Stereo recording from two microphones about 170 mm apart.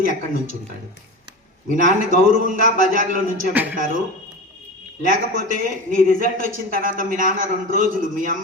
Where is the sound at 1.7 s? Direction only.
50° right (ahead or behind).